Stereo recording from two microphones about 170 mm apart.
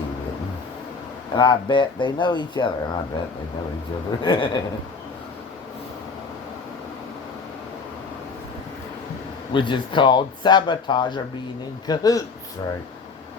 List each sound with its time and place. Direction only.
1.4 s speech: 25° left (ahead or behind)
4.2 s speech: 30° left (ahead or behind)
9.5 s speech: 30° left (ahead or behind)